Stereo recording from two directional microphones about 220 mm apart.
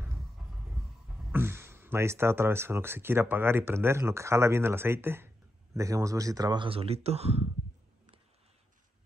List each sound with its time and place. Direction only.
1.3 s speech: 10° right (ahead or behind); by 7.4 s 30° right (ahead or behind)